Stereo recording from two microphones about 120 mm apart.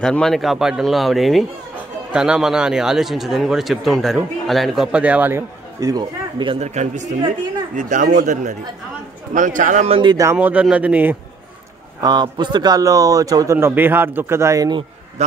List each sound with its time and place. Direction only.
0.0 s speech: 5° left (ahead or behind); by 5.4 s 15° right (ahead or behind)
5.8 s speech: 30° right (ahead or behind)
6.6 s speech: 75° right (ahead or behind)
7.7 s speech: 90° right
9.8 s speech: 45° right (ahead or behind)
10.3 s speech: 10° right (ahead or behind)
12.0 s a man's voice: 35° right (ahead or behind)